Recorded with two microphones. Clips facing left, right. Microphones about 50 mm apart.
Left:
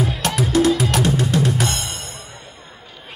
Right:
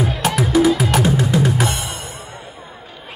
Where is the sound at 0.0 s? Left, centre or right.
Centre.